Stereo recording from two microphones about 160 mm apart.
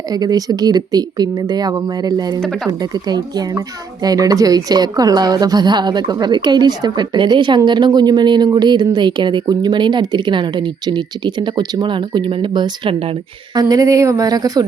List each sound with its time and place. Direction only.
0.1 s speech: 25° right (ahead or behind)
13.6 s speech: 20° right (ahead or behind)